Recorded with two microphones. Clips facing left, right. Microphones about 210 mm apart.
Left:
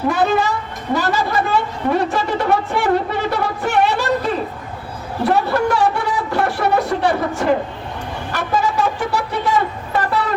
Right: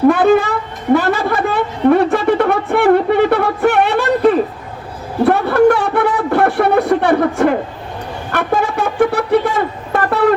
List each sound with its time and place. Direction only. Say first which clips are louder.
0.1 s speech: right 6 dB; 55° right (ahead or behind)
0.9 s a sound: right 3 dB; 60° right (ahead or behind)
9.9 s wind instrument: right 7 dB; 55° right (ahead or behind)